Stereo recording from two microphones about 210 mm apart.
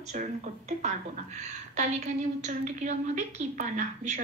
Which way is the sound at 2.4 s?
35° right (ahead or behind).